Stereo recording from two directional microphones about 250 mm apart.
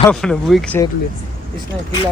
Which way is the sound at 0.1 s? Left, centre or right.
Centre.